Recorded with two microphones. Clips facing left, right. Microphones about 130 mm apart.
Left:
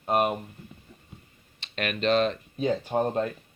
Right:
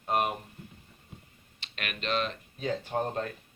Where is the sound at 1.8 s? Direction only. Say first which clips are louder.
Left 8 dB; 35° left (ahead or behind).